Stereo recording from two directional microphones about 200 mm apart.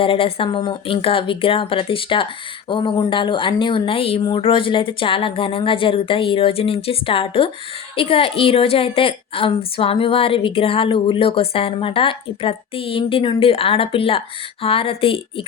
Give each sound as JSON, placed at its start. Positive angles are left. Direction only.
{"t": 0.0, "sound": "a woman's voice", "side_deg": 30}